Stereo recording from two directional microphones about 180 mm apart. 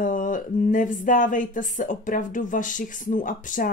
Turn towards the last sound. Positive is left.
turn(degrees=45)  # may be behind; listen again after turning